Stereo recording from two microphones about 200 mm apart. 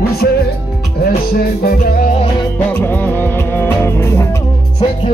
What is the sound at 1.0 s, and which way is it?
Music, 50° left (ahead or behind).